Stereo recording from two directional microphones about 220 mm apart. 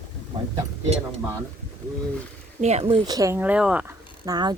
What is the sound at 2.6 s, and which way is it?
Speech, 30° right (ahead or behind).